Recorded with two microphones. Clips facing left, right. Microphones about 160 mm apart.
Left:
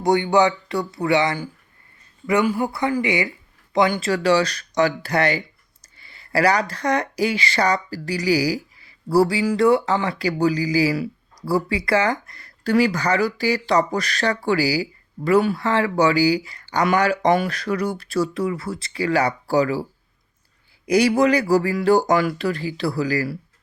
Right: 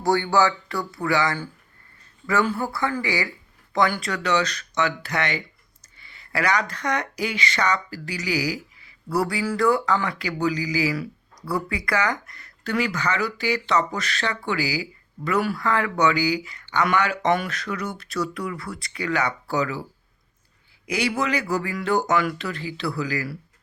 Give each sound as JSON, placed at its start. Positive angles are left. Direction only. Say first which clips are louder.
{"t": 0.0, "sound": "speech", "louder": "left 3 dB", "side_deg": 20}
{"t": 4.1, "sound": "speech", "louder": "left 5 dB", "side_deg": 35}
{"t": 20.8, "sound": "speech", "louder": "left 8 dB", "side_deg": 40}